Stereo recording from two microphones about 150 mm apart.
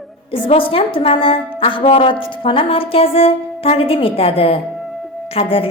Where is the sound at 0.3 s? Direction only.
35° left (ahead or behind).